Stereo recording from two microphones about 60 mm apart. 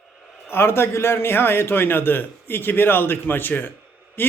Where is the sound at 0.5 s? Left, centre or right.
Left.